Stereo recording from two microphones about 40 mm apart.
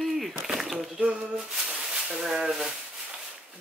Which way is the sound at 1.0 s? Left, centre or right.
Right.